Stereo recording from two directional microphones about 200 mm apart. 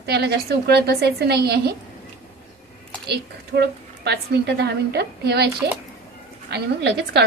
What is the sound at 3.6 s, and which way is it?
A woman's voice, 55° right (ahead or behind).